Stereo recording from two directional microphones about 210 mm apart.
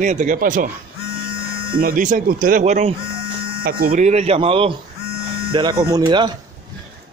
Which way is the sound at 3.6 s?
45° right (ahead or behind).